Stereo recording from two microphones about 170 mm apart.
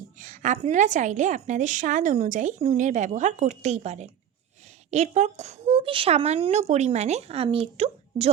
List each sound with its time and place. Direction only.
0.2 s a woman's voice: 50° right (ahead or behind)